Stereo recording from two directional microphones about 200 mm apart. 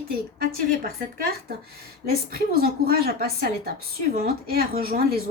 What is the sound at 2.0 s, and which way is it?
A woman's voice, 50° right (ahead or behind).